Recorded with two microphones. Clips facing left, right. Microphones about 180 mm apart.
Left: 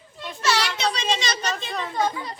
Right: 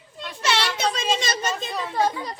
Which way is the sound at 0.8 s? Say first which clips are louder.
Right 1 dB; 50° right (ahead or behind).